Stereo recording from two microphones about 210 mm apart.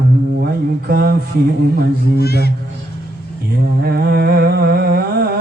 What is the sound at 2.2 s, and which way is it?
Speech, 50° left (ahead or behind).